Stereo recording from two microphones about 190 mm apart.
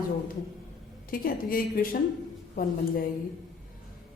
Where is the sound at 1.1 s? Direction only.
50° left (ahead or behind).